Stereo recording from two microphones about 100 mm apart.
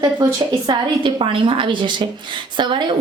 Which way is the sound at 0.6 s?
55° right (ahead or behind).